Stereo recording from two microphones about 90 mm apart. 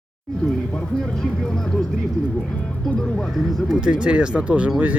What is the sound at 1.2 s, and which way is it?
Speech, 5° left (ahead or behind).